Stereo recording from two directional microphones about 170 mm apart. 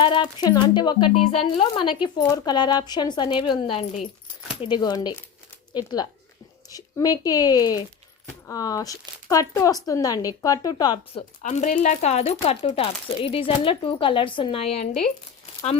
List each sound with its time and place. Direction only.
0.0 s speech: 25° left (ahead or behind)
11.4 s speech: 45° left (ahead or behind)